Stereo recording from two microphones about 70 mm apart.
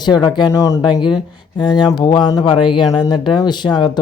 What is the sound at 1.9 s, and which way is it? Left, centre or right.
Speech, left.